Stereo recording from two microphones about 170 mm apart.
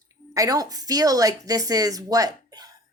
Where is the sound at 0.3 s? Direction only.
20° right (ahead or behind).